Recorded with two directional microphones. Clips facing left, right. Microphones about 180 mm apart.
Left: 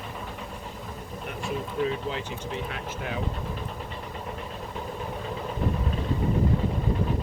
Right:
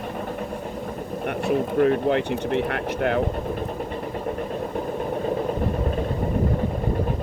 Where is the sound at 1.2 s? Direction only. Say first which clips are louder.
Right 10 dB; 65° right (ahead or behind).